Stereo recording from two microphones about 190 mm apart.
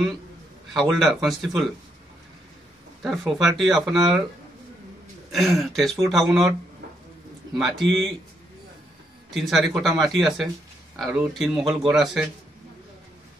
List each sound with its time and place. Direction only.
0.7 s speech: centre (ahead or behind)
3.0 s speech: centre (ahead or behind)
5.3 s speech: centre (ahead or behind)
7.5 s speech: centre (ahead or behind)
9.3 s speech: centre (ahead or behind)